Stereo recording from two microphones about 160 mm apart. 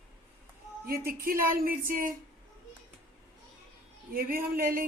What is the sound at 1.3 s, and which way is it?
Speech, 65° right (ahead or behind).